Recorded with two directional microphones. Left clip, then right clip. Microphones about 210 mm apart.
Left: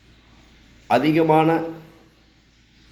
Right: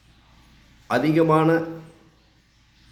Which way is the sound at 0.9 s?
10° right (ahead or behind).